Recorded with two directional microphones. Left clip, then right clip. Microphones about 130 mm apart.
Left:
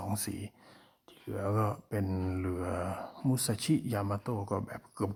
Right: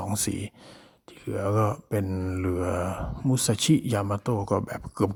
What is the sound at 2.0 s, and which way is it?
Mantra, 10° right (ahead or behind).